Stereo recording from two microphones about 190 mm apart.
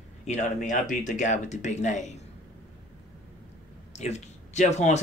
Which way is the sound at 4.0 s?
35° left (ahead or behind).